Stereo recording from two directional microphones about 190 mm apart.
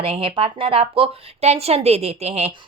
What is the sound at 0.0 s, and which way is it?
Speech, 30° right (ahead or behind).